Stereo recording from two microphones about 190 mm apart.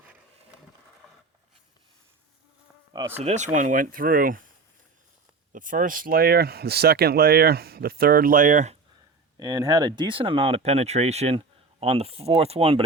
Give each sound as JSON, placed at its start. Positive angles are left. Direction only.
{"t": 1.0, "sound": "a sound", "side_deg": 5}
{"t": 3.2, "sound": "speech", "side_deg": -35}
{"t": 5.5, "sound": "speech", "side_deg": -45}
{"t": 9.4, "sound": "speech", "side_deg": -20}